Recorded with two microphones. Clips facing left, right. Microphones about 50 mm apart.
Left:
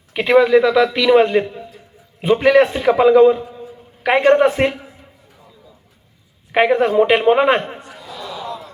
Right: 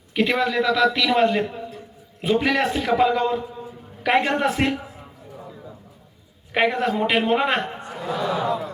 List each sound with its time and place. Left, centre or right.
0.1 s a man's voice: centre
6.5 s a man's voice: centre
7.8 s a sound: right